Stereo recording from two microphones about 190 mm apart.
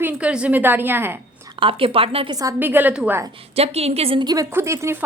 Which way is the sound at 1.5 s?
30° right (ahead or behind).